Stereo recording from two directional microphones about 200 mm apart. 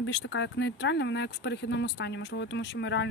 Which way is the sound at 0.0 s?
65° left (ahead or behind).